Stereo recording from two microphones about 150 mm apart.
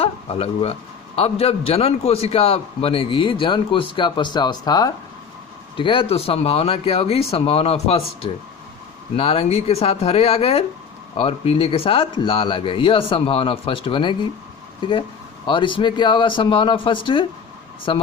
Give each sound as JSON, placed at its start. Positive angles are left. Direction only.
{"t": 0.0, "sound": "a man's voice", "side_deg": 40}